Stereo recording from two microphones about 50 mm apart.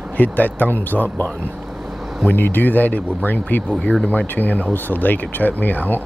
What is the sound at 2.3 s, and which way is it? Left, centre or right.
Speech, left.